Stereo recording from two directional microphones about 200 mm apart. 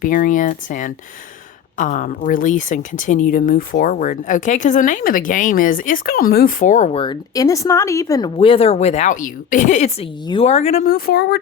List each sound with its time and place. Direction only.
0.0 s speech: 45° left (ahead or behind)